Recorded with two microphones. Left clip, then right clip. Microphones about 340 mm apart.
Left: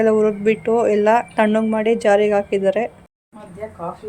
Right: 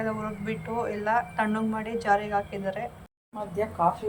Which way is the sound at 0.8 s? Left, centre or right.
Centre.